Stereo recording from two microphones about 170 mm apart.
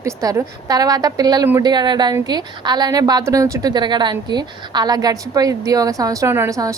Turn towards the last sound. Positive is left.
turn(degrees=-20)  # may be behind; listen again after turning